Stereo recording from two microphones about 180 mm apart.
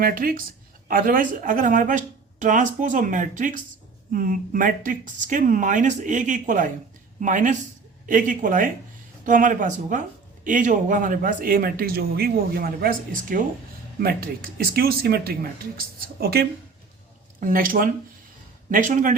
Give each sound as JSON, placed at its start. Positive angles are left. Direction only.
{"t": 0.0, "sound": "speech", "side_deg": -55}